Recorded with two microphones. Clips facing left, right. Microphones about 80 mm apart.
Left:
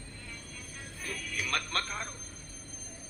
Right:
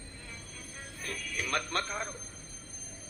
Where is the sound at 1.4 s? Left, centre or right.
Centre.